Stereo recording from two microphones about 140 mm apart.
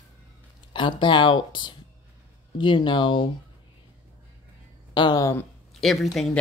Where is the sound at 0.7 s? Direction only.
35° left (ahead or behind).